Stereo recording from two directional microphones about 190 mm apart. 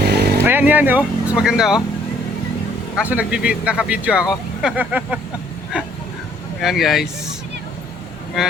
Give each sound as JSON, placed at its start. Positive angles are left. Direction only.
{"t": 0.1, "sound": "chainsaw", "side_deg": -60}
{"t": 0.3, "sound": "speech", "side_deg": -10}
{"t": 3.0, "sound": "speech", "side_deg": -10}